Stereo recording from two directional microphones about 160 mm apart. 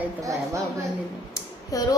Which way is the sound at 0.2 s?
20° right (ahead or behind).